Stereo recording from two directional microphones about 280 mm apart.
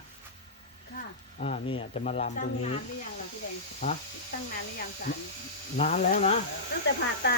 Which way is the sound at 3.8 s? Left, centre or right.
Left.